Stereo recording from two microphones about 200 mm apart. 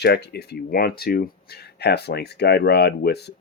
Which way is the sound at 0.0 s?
55° left (ahead or behind).